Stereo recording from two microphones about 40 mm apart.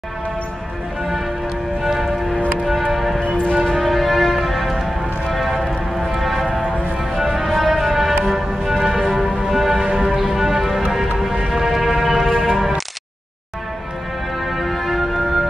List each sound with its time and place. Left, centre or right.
1.8 s music: centre
3.2 s music: left
3.6 s music: centre
9.8 s music: right
10.0 s music: centre
14.4 s music: centre